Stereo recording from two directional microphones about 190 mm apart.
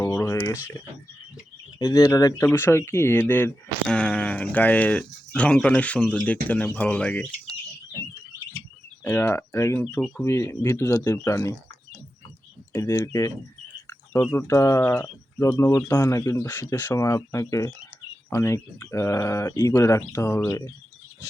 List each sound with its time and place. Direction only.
0.0 s a sound: 15° left (ahead or behind)
1.8 s speech: 20° left (ahead or behind)
9.0 s speech: 10° left (ahead or behind)
12.7 s speech: 15° left (ahead or behind)